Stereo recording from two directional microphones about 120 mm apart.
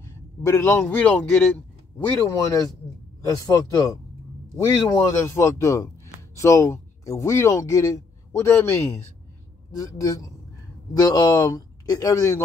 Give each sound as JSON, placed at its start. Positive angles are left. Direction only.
{"t": 0.5, "sound": "a man's voice", "side_deg": 25}
{"t": 2.0, "sound": "speech", "side_deg": 25}
{"t": 5.1, "sound": "speech", "side_deg": 20}